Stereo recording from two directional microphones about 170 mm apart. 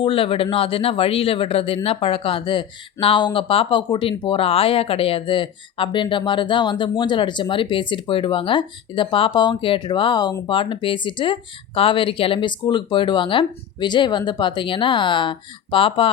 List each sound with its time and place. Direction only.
0.0 s a man's voice: 35° left (ahead or behind)